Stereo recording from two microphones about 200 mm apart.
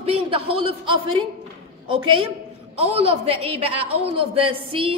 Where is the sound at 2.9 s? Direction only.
30° right (ahead or behind).